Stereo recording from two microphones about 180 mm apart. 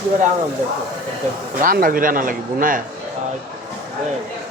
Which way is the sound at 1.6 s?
50° right (ahead or behind).